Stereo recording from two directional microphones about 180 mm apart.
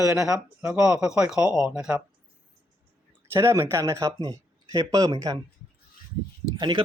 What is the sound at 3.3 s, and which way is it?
Speech, 15° right (ahead or behind).